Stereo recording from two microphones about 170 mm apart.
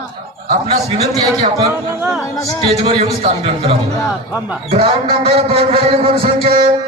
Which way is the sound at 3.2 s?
35° right (ahead or behind).